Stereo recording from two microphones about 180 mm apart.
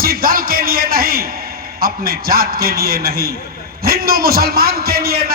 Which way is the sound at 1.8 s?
55° right (ahead or behind).